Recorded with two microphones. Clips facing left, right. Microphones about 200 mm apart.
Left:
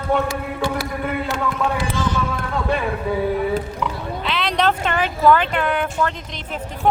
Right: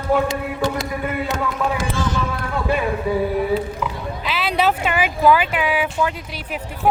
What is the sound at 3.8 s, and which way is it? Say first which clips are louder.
Speech: left 1 dB; 5° right (ahead or behind).